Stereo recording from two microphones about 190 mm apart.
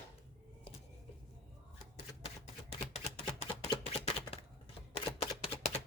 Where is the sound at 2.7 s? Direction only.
35° left (ahead or behind).